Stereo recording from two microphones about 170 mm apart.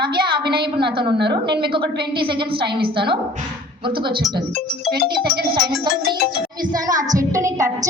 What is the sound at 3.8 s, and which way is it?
Speech, 30° right (ahead or behind).